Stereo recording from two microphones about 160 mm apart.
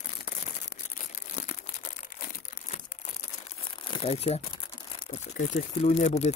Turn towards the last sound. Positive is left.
turn(degrees=45)  # may be behind; listen again after turning